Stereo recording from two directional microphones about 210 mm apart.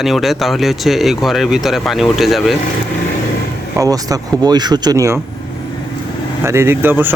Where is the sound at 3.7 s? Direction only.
15° right (ahead or behind).